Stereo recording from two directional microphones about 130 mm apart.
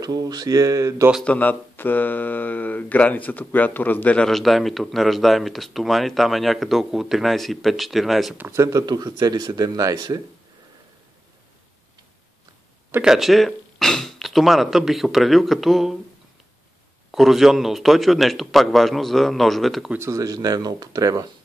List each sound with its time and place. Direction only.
0.0 s speech: 30° right (ahead or behind)
1.2 s speech: 10° left (ahead or behind)
8.5 s speech: 25° right (ahead or behind)
13.0 s speech: 5° right (ahead or behind)
17.1 s speech: centre (ahead or behind)
19.9 s speech: 20° right (ahead or behind)